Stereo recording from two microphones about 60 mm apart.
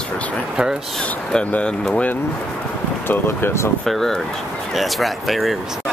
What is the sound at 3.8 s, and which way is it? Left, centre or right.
Speech, centre.